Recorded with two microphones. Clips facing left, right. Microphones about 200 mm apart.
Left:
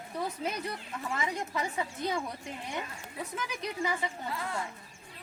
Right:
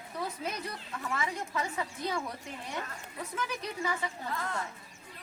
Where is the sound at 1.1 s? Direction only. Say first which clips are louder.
Left 1 dB; 20° left (ahead or behind).